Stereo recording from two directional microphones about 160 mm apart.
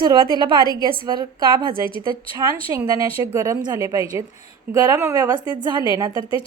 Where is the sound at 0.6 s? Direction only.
25° left (ahead or behind).